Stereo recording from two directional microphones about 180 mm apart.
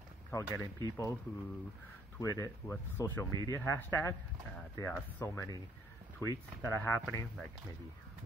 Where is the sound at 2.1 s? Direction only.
15° left (ahead or behind).